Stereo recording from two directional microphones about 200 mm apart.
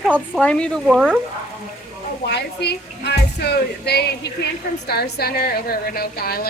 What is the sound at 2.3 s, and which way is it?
Music, 55° left (ahead or behind).